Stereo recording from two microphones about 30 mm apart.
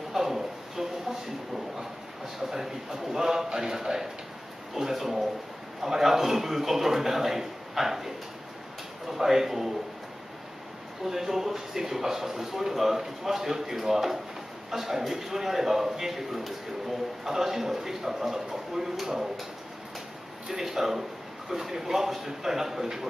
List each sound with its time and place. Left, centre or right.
0.1 s a sound: centre
2.5 s a man's voice: centre
9.1 s a man's voice: centre
11.1 s a man's voice: centre
20.4 s a man's voice: centre